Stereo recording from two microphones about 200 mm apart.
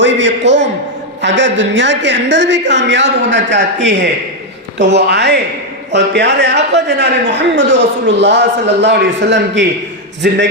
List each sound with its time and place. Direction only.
0.0 s a man's voice: 65° right (ahead or behind)